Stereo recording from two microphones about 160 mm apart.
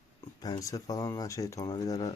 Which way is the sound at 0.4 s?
25° left (ahead or behind).